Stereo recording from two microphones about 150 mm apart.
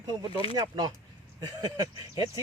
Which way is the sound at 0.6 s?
30° right (ahead or behind).